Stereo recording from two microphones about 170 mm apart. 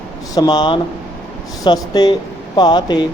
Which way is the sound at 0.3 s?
25° left (ahead or behind).